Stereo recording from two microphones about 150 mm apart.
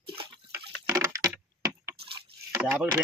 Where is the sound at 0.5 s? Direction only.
15° right (ahead or behind).